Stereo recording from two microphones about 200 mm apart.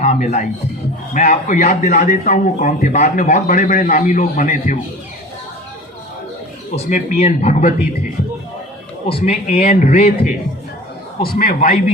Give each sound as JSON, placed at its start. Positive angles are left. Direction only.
{"t": 0.0, "sound": "a man's voice", "side_deg": 35}
{"t": 6.7, "sound": "a man's voice", "side_deg": 35}
{"t": 9.0, "sound": "a man's voice", "side_deg": 30}
{"t": 11.2, "sound": "a man's voice", "side_deg": 45}